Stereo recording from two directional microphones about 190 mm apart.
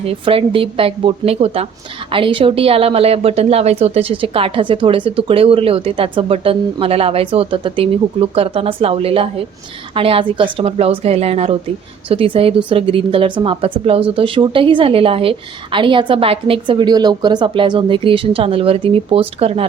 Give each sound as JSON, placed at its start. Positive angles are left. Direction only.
{"t": 0.0, "sound": "a woman's voice", "side_deg": -30}